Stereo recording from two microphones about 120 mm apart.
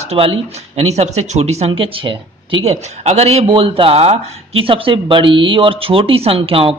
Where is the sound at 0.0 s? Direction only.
55° right (ahead or behind).